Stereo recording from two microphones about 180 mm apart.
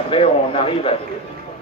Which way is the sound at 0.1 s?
30° left (ahead or behind).